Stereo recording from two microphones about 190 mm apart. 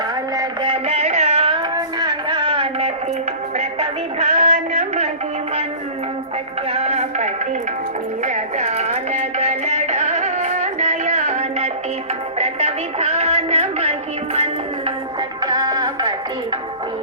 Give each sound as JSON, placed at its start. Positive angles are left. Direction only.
{"t": 0.3, "sound": "music", "side_deg": -30}
{"t": 1.7, "sound": "a sound", "side_deg": -20}
{"t": 3.6, "sound": "music", "side_deg": -40}
{"t": 6.7, "sound": "a sound", "side_deg": -35}
{"t": 8.2, "sound": "music", "side_deg": -40}
{"t": 15.4, "sound": "music", "side_deg": -20}